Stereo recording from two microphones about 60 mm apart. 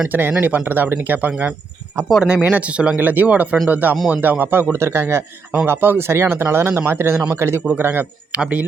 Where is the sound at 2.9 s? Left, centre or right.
Right.